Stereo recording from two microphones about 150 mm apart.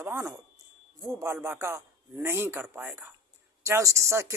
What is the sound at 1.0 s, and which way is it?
A man's voice, 15° right (ahead or behind).